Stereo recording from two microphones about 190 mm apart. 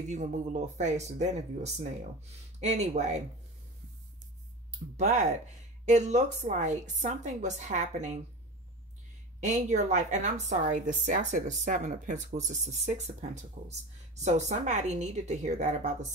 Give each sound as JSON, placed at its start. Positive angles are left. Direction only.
{"t": 0.1, "sound": "a woman's voice", "side_deg": -40}
{"t": 4.9, "sound": "a woman's voice", "side_deg": -40}
{"t": 9.4, "sound": "a woman's voice", "side_deg": -40}